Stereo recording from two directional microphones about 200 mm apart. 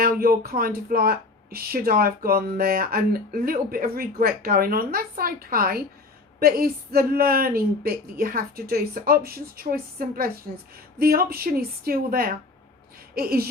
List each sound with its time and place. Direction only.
0.0 s speech: 45° right (ahead or behind)